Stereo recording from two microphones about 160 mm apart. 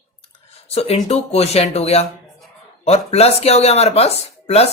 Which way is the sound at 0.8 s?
40° left (ahead or behind).